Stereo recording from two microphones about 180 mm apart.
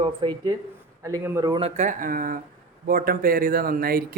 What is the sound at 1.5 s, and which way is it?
A man's voice, 40° right (ahead or behind).